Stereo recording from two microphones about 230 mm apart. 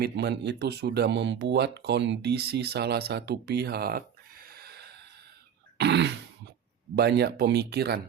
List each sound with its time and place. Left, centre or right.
0.0 s speech: right
5.7 s a sound: right
6.9 s speech: right